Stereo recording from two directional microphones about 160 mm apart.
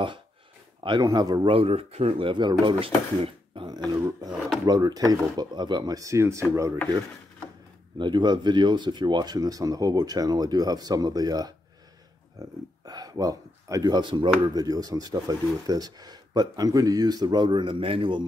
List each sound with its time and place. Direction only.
0.8 s speech: 25° right (ahead or behind)
8.0 s speech: 30° right (ahead or behind)